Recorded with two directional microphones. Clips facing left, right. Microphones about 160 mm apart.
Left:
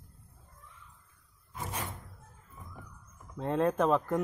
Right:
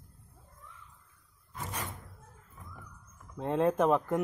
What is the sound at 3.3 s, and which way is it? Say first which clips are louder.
Speech: right 1 dB; 5° right (ahead or behind).